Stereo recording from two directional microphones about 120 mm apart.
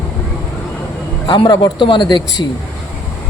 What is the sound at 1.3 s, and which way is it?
A man's voice, 40° left (ahead or behind).